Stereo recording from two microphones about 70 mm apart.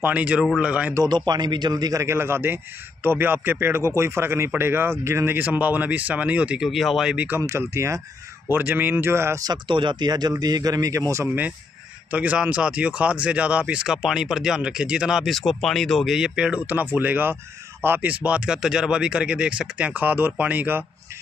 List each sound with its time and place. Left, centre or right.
0.0 s speech: centre
1.0 s a man's voice: right
2.0 s a man's voice: right
5.4 s speech: right
6.6 s speech: centre
7.2 s speech: right
7.4 s speech: right
8.5 s a man's voice: right
9.4 s speech: right
10.4 s speech: right
12.1 s speech: right; by 15.3 s centre
15.3 s speech: centre
16.1 s speech: centre; by 20.8 s right